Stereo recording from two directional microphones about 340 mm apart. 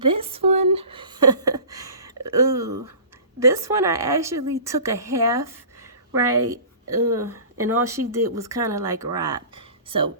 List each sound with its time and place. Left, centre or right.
0.0 s a sound: centre
3.4 s speech: centre
6.1 s a woman's voice: right
7.1 s speech: centre
7.5 s a woman's voice: right
7.9 s speech: centre